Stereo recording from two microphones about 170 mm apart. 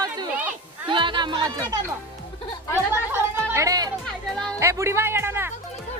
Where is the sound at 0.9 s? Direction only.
30° right (ahead or behind).